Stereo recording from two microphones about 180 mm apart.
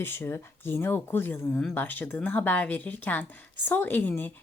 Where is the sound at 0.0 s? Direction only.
15° left (ahead or behind).